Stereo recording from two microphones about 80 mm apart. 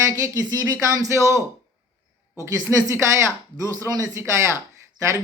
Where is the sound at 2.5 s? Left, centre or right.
Right.